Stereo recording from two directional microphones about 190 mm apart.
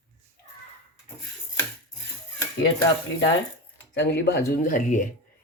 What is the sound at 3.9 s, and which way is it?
Speech, 65° left (ahead or behind).